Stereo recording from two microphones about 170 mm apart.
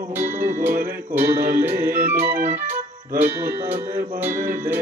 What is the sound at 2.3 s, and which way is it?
Organ, 55° right (ahead or behind).